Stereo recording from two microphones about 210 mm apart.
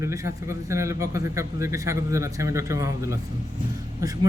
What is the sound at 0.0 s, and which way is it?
Speech, 15° right (ahead or behind).